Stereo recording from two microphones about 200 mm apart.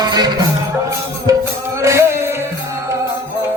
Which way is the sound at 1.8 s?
15° right (ahead or behind).